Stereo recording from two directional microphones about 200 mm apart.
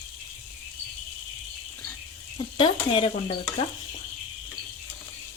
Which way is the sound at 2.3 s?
25° left (ahead or behind).